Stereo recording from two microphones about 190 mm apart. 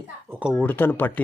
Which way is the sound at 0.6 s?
10° left (ahead or behind).